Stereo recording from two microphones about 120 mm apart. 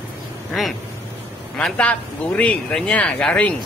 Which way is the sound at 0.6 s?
Centre (ahead or behind).